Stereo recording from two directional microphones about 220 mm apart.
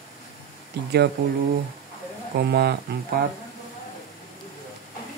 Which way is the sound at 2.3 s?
45° right (ahead or behind).